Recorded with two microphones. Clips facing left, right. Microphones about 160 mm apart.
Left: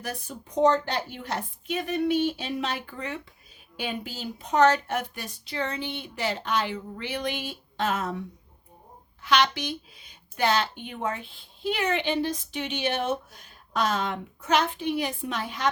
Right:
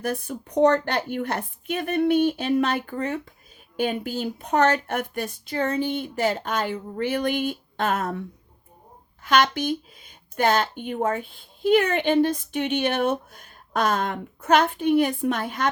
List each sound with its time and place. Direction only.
0.0 s a woman's voice: 55° right (ahead or behind)
9.2 s speech: 50° right (ahead or behind)